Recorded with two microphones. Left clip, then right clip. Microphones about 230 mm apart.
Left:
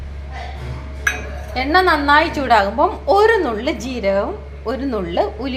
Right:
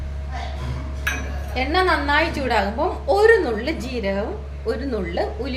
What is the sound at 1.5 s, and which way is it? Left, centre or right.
A woman's voice, centre.